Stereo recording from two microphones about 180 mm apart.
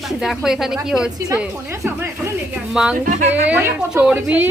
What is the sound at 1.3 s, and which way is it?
A woman's voice, 15° right (ahead or behind).